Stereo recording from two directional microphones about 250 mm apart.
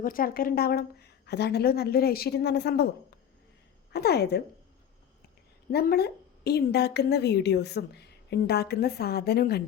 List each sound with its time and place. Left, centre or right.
0.0 s a woman's voice: left
3.9 s a woman's voice: left
5.7 s a woman's voice: left